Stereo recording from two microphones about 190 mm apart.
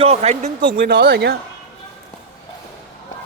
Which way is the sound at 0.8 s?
60° right (ahead or behind).